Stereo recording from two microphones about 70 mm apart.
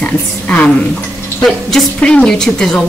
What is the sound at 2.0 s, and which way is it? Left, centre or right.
Speech, centre.